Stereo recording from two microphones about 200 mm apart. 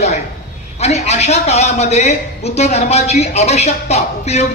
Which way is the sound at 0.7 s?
35° left (ahead or behind).